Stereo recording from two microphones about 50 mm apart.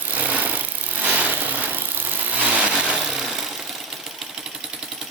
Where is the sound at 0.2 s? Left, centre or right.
Right.